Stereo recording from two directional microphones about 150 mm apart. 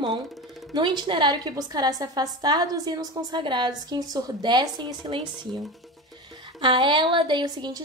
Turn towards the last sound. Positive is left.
turn(degrees=-25)  # may be behind; listen again after turning